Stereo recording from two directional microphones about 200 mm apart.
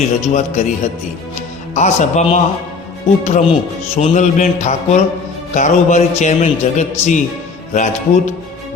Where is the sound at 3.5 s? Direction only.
30° left (ahead or behind).